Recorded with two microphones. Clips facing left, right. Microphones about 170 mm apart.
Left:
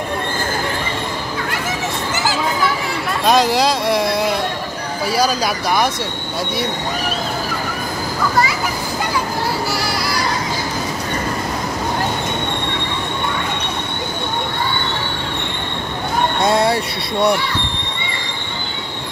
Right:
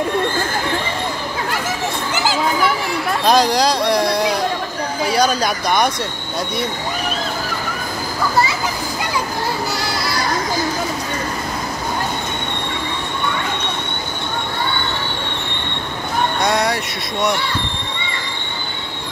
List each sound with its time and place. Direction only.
3.3 s a sound: centre (ahead or behind)
5.1 s speech: 5° left (ahead or behind)
16.3 s speech: 25° left (ahead or behind)